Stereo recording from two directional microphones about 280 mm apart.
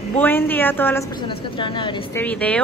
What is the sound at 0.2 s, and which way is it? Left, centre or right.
A woman's voice, centre.